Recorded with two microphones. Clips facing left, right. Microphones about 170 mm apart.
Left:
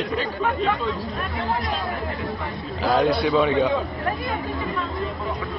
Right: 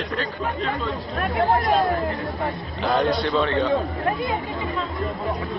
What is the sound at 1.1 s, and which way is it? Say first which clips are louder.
Speech: right 5 dB; 55° right (ahead or behind).